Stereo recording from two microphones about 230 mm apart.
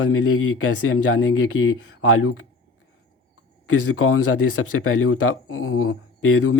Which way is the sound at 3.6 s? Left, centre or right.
Left.